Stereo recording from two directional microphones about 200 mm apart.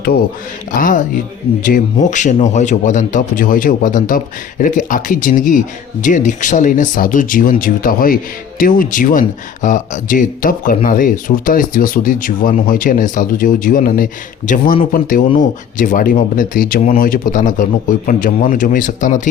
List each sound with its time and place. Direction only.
0.7 s speech: 40° left (ahead or behind)